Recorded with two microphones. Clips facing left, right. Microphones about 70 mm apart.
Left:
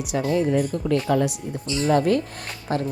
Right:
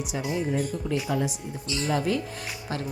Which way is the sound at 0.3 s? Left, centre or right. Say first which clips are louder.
Left 6 dB; left.